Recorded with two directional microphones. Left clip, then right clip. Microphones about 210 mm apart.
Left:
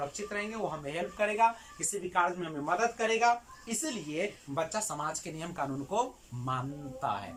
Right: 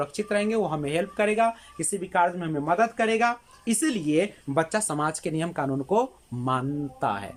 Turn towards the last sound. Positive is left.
turn(degrees=-45)  # may be behind; listen again after turning